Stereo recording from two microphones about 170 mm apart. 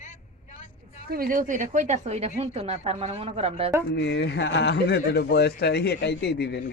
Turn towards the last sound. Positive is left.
turn(degrees=75)  # may be behind; listen again after turning